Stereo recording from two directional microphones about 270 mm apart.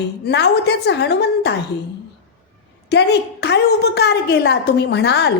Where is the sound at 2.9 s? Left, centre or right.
Left.